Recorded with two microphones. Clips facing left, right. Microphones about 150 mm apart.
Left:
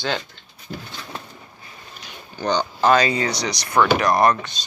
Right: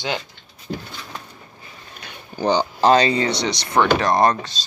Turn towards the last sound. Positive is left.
turn(degrees=-30)  # may be behind; listen again after turning